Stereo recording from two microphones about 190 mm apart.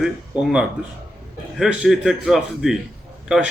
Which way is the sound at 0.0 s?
5° right (ahead or behind).